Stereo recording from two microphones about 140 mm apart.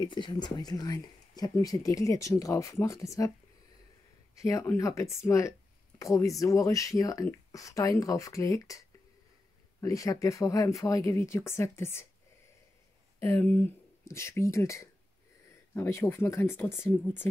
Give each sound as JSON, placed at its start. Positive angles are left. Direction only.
{"t": 0.0, "sound": "speech", "side_deg": 35}
{"t": 4.4, "sound": "speech", "side_deg": 20}
{"t": 13.2, "sound": "speech", "side_deg": 15}